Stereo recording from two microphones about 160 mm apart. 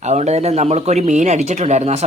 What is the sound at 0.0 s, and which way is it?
Speech, 45° right (ahead or behind).